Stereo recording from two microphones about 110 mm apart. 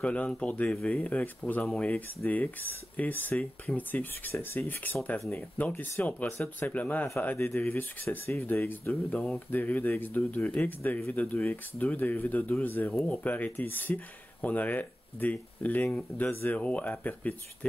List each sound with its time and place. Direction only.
0.0 s speech: 10° left (ahead or behind)
16.3 s speech: 20° left (ahead or behind)